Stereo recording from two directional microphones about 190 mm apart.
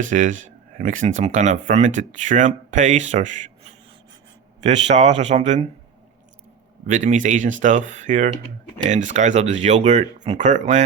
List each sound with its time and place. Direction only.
0.1 s speech: 40° right (ahead or behind)
6.8 s speech: 40° right (ahead or behind)